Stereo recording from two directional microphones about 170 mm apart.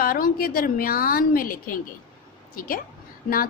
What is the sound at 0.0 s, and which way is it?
A woman's voice, 55° left (ahead or behind).